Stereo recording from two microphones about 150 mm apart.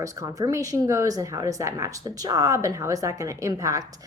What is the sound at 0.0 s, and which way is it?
Speech, 25° right (ahead or behind).